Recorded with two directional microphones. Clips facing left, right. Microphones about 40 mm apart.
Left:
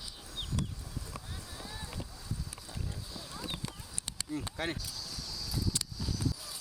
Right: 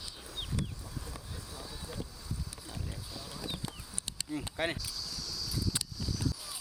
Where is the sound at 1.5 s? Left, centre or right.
Left.